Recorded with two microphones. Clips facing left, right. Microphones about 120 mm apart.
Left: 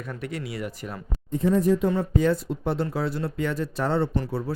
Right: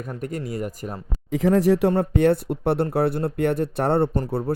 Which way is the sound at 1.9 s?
60° right (ahead or behind).